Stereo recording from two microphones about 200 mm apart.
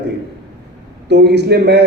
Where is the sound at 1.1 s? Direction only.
55° right (ahead or behind).